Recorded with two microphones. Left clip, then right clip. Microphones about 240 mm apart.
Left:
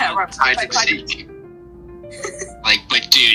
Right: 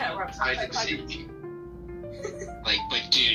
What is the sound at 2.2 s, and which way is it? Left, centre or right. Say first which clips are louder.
Speech: left 11 dB; left.